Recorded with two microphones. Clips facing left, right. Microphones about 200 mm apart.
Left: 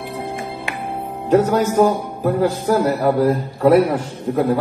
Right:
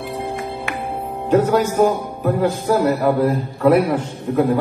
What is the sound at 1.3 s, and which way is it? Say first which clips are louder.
A man's voice: left 1 dB; 35° left (ahead or behind).